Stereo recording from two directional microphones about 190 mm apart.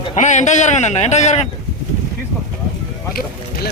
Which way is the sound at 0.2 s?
40° left (ahead or behind).